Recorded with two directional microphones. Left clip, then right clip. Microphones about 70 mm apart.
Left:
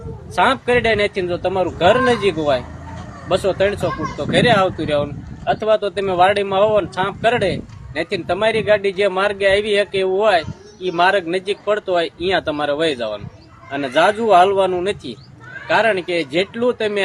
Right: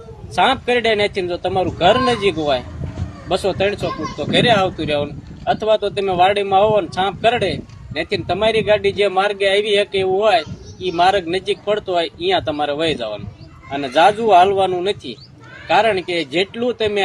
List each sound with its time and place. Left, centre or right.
0.3 s a man's voice: left
1.8 s a man's voice: left
11.3 s speech: left
13.7 s a man's voice: centre
14.3 s a man's voice: left